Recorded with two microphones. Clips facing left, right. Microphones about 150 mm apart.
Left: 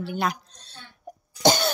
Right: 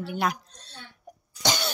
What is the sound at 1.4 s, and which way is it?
Cough, 45° left (ahead or behind).